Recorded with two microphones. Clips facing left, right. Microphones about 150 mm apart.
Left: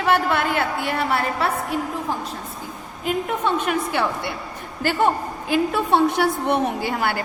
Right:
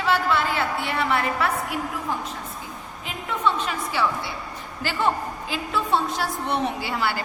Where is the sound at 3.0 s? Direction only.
50° left (ahead or behind).